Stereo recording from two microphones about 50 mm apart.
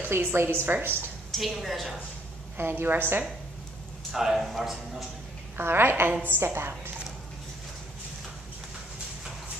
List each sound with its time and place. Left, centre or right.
0.0 s a woman's voice: right
1.3 s a man's voice: centre
2.5 s a woman's voice: right
4.1 s a man's voice: centre
5.6 s a woman's voice: right